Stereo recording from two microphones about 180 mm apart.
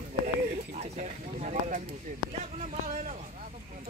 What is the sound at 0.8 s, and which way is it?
Speech, 40° right (ahead or behind).